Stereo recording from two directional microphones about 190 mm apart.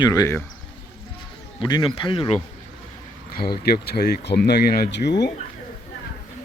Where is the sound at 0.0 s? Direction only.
20° left (ahead or behind).